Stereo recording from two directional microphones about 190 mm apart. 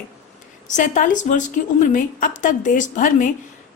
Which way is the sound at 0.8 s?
45° left (ahead or behind).